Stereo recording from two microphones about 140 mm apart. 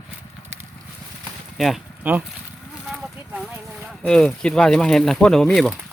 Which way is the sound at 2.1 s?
15° right (ahead or behind).